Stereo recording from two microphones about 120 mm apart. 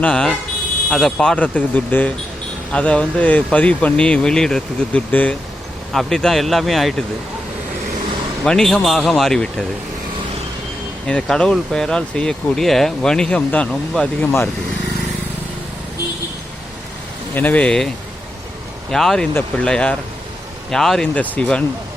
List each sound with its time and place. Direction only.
0.0 s speech: 5° left (ahead or behind)
8.4 s speech: 5° left (ahead or behind)
11.0 s speech: 5° left (ahead or behind)
14.3 s speech: 20° left (ahead or behind)
17.3 s speech: 15° left (ahead or behind)